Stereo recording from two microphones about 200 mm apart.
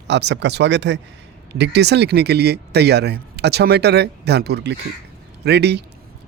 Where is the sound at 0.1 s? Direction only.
60° right (ahead or behind).